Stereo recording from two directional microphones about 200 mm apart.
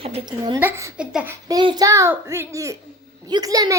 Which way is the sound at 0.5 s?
10° right (ahead or behind).